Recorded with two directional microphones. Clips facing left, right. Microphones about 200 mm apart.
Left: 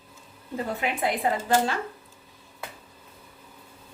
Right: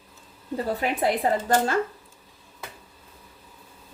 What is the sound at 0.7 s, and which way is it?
Speech, 40° right (ahead or behind).